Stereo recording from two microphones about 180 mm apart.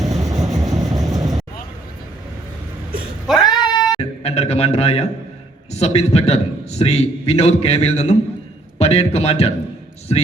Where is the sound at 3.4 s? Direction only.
25° left (ahead or behind).